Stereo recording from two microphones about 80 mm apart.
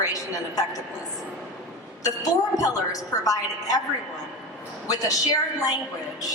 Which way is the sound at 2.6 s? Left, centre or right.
Left.